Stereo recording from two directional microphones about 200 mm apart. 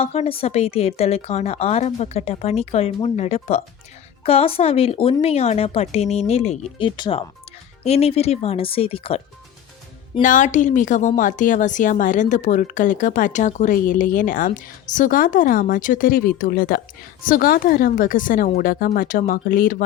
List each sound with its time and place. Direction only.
0.0 s a woman's voice: 30° left (ahead or behind)
10.2 s a woman's voice: 40° left (ahead or behind)